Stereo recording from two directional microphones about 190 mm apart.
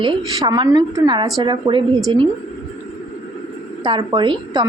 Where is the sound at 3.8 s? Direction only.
25° right (ahead or behind).